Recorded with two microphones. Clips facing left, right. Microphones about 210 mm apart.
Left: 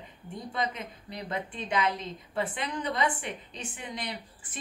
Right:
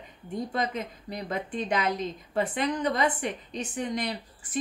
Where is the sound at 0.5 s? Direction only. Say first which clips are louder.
Even; 45° right (ahead or behind).